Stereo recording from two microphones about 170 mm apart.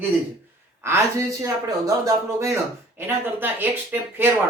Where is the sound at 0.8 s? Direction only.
15° right (ahead or behind).